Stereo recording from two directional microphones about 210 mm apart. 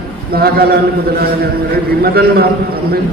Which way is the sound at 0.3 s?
45° right (ahead or behind).